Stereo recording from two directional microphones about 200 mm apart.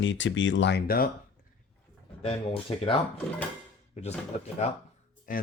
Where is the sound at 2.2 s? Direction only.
30° left (ahead or behind).